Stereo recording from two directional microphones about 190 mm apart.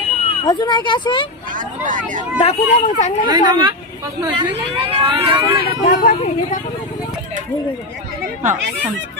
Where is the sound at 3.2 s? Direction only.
25° right (ahead or behind).